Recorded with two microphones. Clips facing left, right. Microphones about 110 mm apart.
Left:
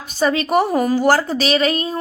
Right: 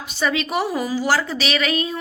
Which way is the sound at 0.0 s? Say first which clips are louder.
Left 4 dB; 40° left (ahead or behind).